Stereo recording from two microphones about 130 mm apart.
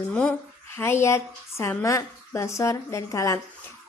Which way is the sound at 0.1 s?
10° left (ahead or behind).